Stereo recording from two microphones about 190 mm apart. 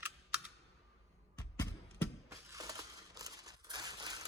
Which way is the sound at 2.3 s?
15° right (ahead or behind).